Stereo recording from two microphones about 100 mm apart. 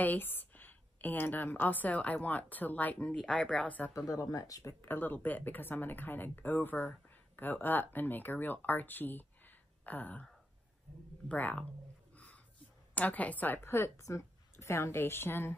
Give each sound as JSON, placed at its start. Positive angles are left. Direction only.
{"t": 0.0, "sound": "a woman's voice", "side_deg": 20}
{"t": 3.9, "sound": "speech", "side_deg": 35}
{"t": 4.8, "sound": "a woman's voice", "side_deg": 20}
{"t": 11.2, "sound": "a woman's voice", "side_deg": 15}
{"t": 12.9, "sound": "speech", "side_deg": 15}